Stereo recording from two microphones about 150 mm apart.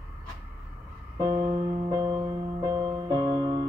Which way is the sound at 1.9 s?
25° right (ahead or behind).